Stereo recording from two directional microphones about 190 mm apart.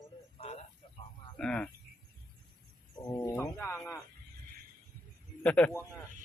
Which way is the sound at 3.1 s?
20° left (ahead or behind).